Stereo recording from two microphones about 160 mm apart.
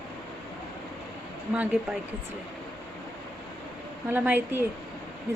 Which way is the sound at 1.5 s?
10° right (ahead or behind).